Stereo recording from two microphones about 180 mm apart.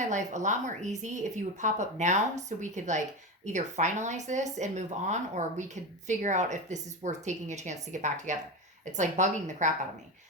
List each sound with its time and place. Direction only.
0.0 s speech: 40° right (ahead or behind)